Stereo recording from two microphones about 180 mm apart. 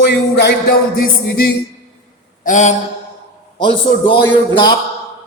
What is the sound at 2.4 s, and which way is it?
Mantra, 45° left (ahead or behind).